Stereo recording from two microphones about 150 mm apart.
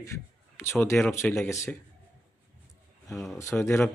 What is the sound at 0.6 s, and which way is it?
Speech, 15° left (ahead or behind).